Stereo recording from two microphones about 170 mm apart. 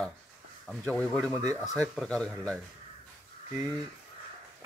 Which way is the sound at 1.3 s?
20° right (ahead or behind).